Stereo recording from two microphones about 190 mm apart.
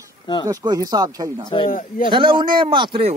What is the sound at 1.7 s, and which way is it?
Speech, 45° left (ahead or behind).